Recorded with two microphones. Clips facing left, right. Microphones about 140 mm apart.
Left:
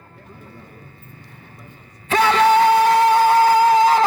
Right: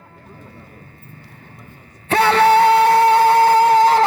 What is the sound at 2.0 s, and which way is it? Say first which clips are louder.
Music: right 2 dB; 65° right (ahead or behind).